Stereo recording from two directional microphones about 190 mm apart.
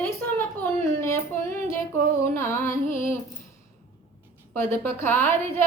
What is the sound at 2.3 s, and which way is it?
Speech, 15° left (ahead or behind).